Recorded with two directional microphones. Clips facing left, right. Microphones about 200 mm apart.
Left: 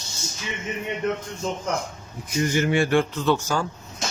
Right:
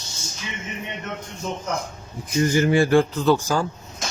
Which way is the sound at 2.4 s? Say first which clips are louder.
Right 3 dB; 35° right (ahead or behind).